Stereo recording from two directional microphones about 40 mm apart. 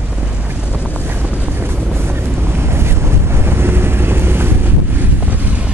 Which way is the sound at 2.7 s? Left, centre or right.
Right.